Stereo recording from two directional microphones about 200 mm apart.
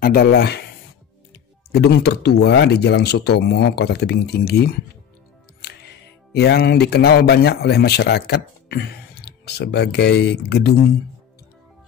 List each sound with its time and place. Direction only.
0.0 s speech: 50° left (ahead or behind)
6.3 s speech: 55° left (ahead or behind)